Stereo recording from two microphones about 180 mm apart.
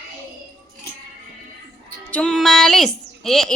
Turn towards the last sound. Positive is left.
turn(degrees=0)  # may be behind; listen again after turning